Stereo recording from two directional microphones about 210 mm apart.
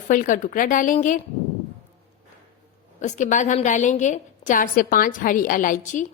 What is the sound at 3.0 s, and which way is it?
A woman's voice, 35° left (ahead or behind).